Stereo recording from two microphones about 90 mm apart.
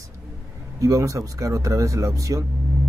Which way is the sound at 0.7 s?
40° right (ahead or behind).